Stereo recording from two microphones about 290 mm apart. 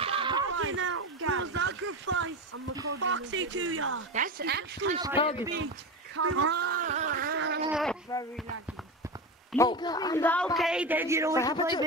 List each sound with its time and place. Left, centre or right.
0.0 s a sound: centre
0.5 s a sound: right
2.9 s speech: right
4.1 s a woman's voice: right
5.1 s speech: centre
6.1 s speech: right
6.8 s a sound: right
7.7 s speech: centre
9.5 s a man's voice: centre
11.3 s a man's voice: centre